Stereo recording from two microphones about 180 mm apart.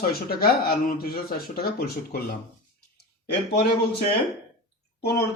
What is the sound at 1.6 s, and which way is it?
Speech, 55° left (ahead or behind).